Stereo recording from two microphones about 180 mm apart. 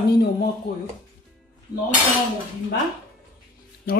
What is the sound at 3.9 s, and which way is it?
Speech, 60° left (ahead or behind).